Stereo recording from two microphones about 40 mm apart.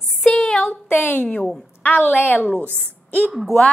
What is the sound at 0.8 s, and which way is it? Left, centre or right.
Speech, left.